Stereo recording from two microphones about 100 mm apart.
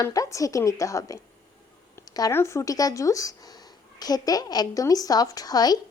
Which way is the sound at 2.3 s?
30° left (ahead or behind).